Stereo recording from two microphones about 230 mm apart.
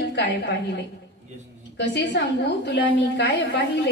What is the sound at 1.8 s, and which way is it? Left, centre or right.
A woman's voice, left.